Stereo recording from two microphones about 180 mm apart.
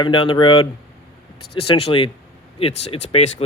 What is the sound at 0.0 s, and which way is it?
Speech, 25° left (ahead or behind).